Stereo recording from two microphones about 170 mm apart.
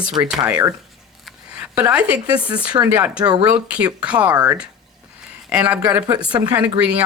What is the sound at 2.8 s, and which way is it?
Speech, 10° right (ahead or behind).